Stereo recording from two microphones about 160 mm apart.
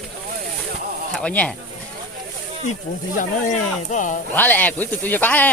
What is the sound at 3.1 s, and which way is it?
Speech, 50° left (ahead or behind).